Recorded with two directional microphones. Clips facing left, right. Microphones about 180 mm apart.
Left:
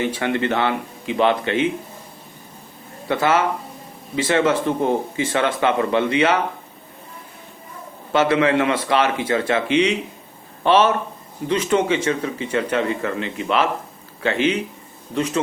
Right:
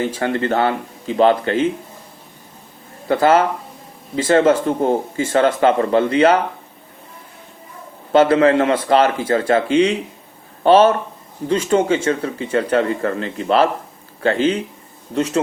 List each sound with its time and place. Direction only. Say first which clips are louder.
0.0 s speech: right 1 dB; 35° right (ahead or behind)
3.1 s speech: right 5 dB; 35° right (ahead or behind)
8.1 s a man's voice: right 5 dB; 30° right (ahead or behind)